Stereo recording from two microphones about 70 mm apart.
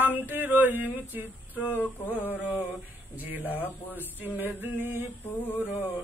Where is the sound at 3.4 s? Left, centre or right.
Left.